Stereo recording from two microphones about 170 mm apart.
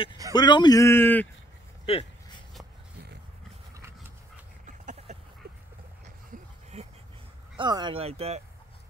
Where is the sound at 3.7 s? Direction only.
15° right (ahead or behind).